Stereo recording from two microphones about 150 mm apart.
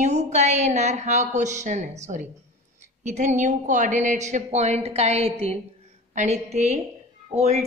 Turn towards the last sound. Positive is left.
turn(degrees=-45)  # may be behind; listen again after turning